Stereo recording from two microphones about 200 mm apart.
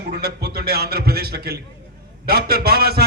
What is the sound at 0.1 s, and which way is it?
A man's voice, 50° right (ahead or behind).